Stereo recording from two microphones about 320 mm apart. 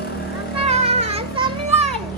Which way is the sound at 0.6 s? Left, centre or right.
Centre.